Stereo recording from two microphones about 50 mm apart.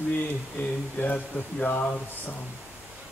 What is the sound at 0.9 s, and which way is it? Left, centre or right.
Speech, left.